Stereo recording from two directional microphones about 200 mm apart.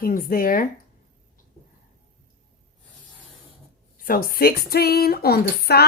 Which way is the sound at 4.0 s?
45° left (ahead or behind).